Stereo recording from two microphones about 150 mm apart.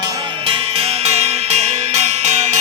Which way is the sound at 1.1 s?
45° right (ahead or behind).